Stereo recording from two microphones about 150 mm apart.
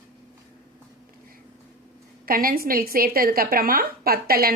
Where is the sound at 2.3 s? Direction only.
75° right (ahead or behind).